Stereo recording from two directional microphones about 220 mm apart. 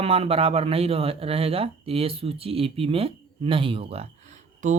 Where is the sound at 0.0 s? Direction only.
25° right (ahead or behind).